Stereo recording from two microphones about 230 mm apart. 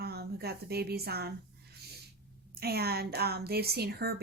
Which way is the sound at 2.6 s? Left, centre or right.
Right.